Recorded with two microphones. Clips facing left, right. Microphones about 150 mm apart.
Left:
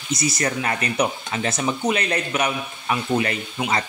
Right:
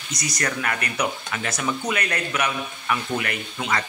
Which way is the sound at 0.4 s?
25° left (ahead or behind).